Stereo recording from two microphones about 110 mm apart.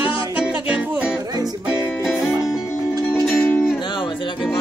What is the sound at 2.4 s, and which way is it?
Music, 35° left (ahead or behind).